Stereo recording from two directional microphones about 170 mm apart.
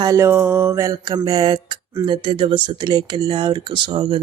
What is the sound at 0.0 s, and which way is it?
Speech, 20° right (ahead or behind).